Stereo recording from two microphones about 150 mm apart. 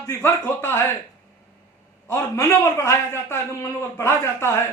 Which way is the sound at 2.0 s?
15° left (ahead or behind).